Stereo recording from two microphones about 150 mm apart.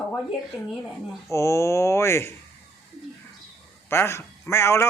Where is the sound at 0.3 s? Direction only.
Centre (ahead or behind).